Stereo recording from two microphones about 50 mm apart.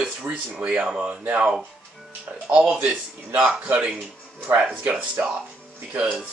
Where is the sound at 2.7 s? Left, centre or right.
Right.